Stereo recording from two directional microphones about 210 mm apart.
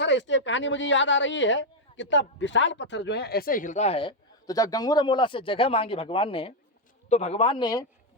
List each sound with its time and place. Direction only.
0.0 s a man's voice: 60° left (ahead or behind); by 7.9 s 20° left (ahead or behind)